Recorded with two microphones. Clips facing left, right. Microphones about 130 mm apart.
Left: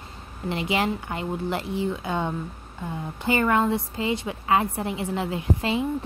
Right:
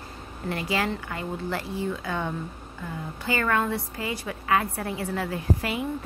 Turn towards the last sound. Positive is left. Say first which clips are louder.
# left 3 dB
turn(degrees=25)  # may be behind; listen again after turning